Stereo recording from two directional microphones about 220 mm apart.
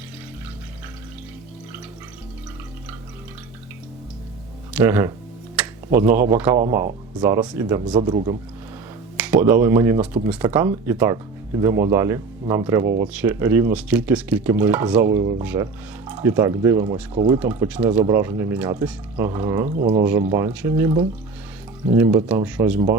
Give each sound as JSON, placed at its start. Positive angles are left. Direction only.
{"t": 4.8, "sound": "speech", "side_deg": -10}
{"t": 5.5, "sound": "tick-tock", "side_deg": -10}
{"t": 6.1, "sound": "speech", "side_deg": -10}
{"t": 9.1, "sound": "speech", "side_deg": -5}
{"t": 17.4, "sound": "speech", "side_deg": -5}
{"t": 19.6, "sound": "speech", "side_deg": -40}
{"t": 20.3, "sound": "speech", "side_deg": -10}
{"t": 21.9, "sound": "speech", "side_deg": -10}